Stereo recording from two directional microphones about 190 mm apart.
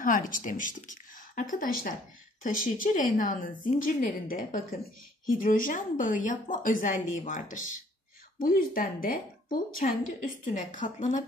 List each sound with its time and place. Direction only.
0.0 s a woman's voice: 45° left (ahead or behind)